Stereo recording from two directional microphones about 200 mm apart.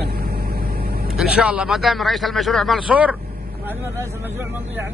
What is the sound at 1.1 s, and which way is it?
A man's voice, 5° right (ahead or behind).